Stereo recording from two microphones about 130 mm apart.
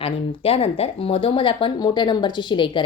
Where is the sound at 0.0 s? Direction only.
50° left (ahead or behind).